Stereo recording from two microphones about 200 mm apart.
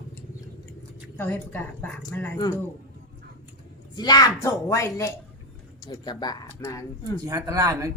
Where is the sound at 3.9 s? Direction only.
20° left (ahead or behind).